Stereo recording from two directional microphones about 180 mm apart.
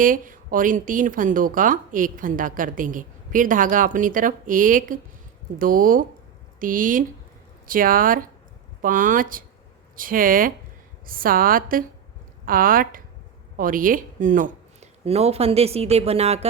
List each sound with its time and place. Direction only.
0.0 s a woman's voice: 50° right (ahead or behind)